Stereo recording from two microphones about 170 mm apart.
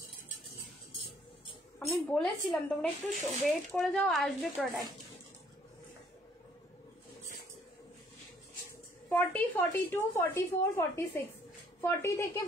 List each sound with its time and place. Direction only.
2.1 s speech: 5° left (ahead or behind)
9.1 s a woman's voice: 10° left (ahead or behind)